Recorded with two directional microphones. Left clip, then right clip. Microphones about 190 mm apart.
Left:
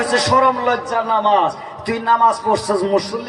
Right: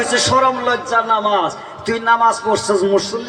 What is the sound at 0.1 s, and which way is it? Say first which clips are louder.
A man's voice: left 1 dB; 20° right (ahead or behind).